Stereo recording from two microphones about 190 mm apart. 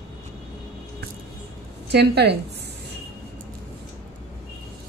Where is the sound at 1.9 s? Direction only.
60° right (ahead or behind).